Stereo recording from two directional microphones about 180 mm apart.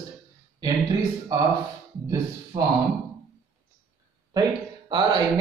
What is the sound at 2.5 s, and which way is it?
Speech, 30° right (ahead or behind).